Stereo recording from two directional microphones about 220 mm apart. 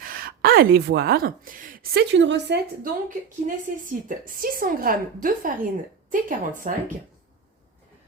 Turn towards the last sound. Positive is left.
turn(degrees=-35)  # may be behind; listen again after turning